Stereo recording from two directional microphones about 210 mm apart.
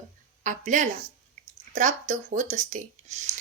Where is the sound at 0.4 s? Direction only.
35° right (ahead or behind).